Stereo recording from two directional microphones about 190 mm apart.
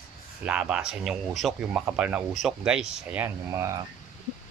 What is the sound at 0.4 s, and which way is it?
Speech, 5° right (ahead or behind).